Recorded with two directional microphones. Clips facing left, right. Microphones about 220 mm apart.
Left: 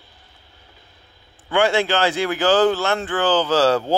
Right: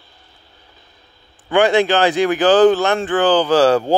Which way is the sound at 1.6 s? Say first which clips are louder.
Right 4 dB; 15° right (ahead or behind).